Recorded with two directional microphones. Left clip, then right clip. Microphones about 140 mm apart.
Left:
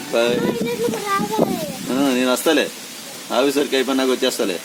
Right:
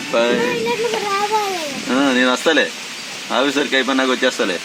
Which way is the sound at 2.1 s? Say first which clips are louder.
Right 2 dB; 5° left (ahead or behind).